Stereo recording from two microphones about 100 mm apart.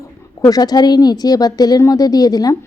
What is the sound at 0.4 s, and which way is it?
A woman's voice, 40° left (ahead or behind).